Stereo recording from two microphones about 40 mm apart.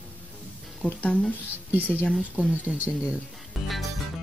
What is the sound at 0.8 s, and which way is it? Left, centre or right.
Speech, left.